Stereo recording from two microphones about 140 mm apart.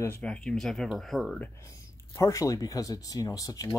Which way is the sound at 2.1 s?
25° left (ahead or behind).